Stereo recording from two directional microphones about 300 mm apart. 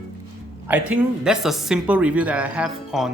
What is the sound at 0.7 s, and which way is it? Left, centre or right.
Speech, centre.